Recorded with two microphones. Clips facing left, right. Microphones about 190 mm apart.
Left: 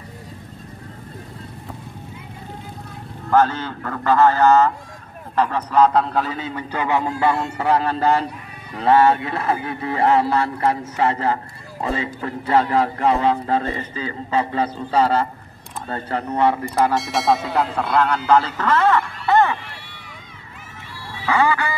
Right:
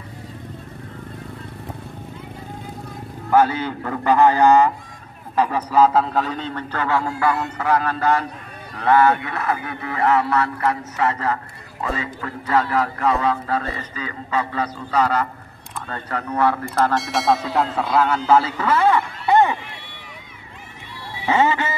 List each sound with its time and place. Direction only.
3.3 s a man's voice: 10° right (ahead or behind); by 16.9 s 15° left (ahead or behind)
16.9 s speech: centre (ahead or behind); by 19.6 s 15° right (ahead or behind)
21.1 s a sound: 20° right (ahead or behind)